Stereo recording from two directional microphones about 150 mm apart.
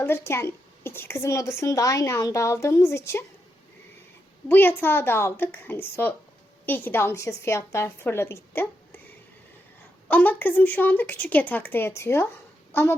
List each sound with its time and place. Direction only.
0.0 s a woman's voice: 15° left (ahead or behind)
4.4 s a woman's voice: 15° left (ahead or behind)
10.1 s a woman's voice: 10° left (ahead or behind)